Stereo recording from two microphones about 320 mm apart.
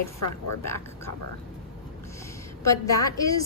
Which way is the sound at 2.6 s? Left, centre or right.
Centre.